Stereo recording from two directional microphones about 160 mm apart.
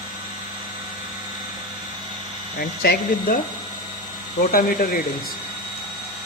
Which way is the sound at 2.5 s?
70° left (ahead or behind).